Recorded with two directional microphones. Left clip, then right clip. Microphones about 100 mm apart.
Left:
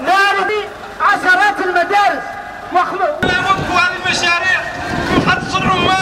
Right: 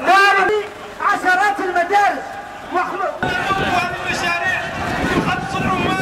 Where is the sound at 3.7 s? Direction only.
45° left (ahead or behind).